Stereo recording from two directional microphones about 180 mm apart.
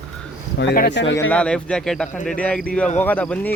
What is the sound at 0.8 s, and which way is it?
Speech, 75° left (ahead or behind).